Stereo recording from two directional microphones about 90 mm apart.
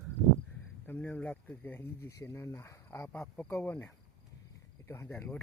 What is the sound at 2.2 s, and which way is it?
Speech, 30° left (ahead or behind).